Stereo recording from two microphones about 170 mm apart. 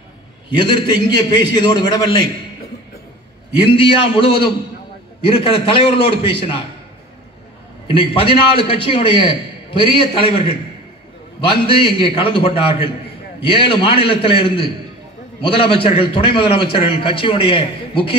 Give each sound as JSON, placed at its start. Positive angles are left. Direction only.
{"t": 0.6, "sound": "a man's voice", "side_deg": 25}
{"t": 3.7, "sound": "a man's voice", "side_deg": 30}
{"t": 7.9, "sound": "a man's voice", "side_deg": 30}
{"t": 11.6, "sound": "a man's voice", "side_deg": 30}